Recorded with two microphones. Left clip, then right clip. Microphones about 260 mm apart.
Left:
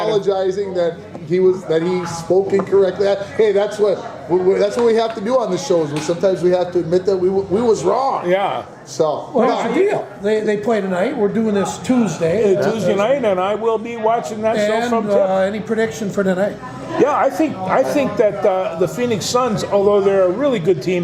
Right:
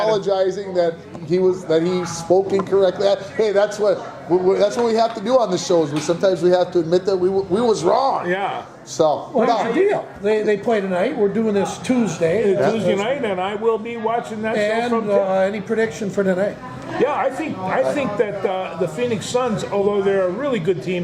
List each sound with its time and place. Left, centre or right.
0.0 s a man's voice: right
8.3 s speech: left
9.0 s speech: right
9.8 s speech: centre
12.5 s speech: left
14.5 s speech: centre
17.0 s speech: left